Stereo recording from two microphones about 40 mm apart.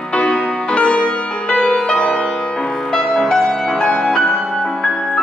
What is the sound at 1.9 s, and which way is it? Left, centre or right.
Music, left.